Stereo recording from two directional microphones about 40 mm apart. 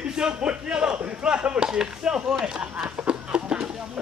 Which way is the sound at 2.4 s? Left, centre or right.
Right.